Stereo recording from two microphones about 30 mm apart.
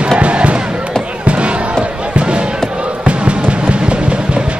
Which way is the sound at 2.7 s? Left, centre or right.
Right.